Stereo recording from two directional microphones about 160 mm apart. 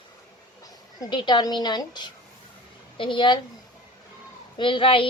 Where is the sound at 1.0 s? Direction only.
30° left (ahead or behind).